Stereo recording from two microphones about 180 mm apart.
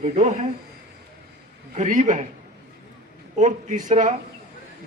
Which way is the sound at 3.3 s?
45° right (ahead or behind).